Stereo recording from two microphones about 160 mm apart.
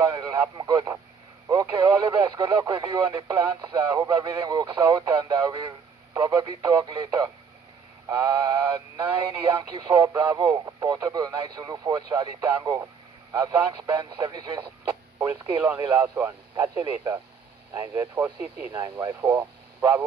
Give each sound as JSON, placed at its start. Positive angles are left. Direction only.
{"t": 0.1, "sound": "speech", "side_deg": -20}